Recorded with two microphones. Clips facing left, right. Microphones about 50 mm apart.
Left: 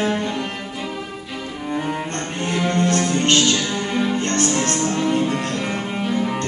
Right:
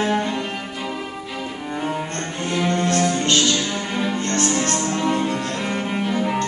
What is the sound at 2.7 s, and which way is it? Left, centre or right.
Music, left.